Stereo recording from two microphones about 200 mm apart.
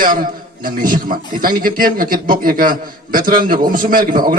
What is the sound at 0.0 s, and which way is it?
A man's voice, 45° right (ahead or behind).